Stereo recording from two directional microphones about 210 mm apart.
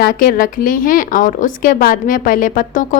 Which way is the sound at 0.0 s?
40° left (ahead or behind).